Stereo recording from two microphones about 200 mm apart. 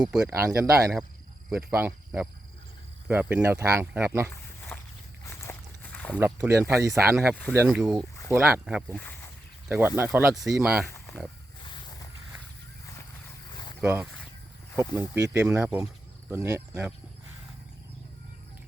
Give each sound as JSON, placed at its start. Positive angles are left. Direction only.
{"t": 0.1, "sound": "speech", "side_deg": -5}
{"t": 0.3, "sound": "speech", "side_deg": -15}
{"t": 4.7, "sound": "walk", "side_deg": 5}
{"t": 5.2, "sound": "a sound", "side_deg": 10}
{"t": 6.1, "sound": "speech", "side_deg": -10}
{"t": 7.7, "sound": "speech", "side_deg": 0}
{"t": 9.0, "sound": "speech", "side_deg": 10}
{"t": 9.6, "sound": "speech", "side_deg": -10}
{"t": 10.3, "sound": "speech", "side_deg": 0}
{"t": 10.8, "sound": "a sound", "side_deg": 15}
{"t": 13.8, "sound": "speech", "side_deg": -10}